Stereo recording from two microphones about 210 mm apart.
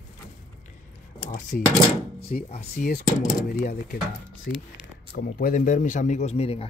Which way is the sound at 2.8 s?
40° left (ahead or behind).